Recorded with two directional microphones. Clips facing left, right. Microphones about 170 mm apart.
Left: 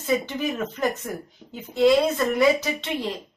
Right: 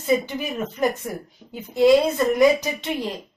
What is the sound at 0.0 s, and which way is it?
A woman's voice, 15° right (ahead or behind).